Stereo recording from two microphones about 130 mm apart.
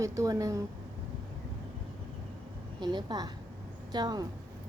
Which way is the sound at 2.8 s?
30° right (ahead or behind).